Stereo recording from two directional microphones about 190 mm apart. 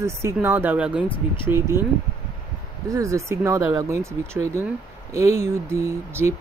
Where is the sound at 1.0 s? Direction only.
25° left (ahead or behind).